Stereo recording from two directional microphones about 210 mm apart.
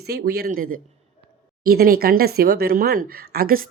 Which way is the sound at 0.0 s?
50° right (ahead or behind).